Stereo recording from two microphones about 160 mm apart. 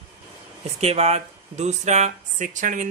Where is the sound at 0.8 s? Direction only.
40° right (ahead or behind).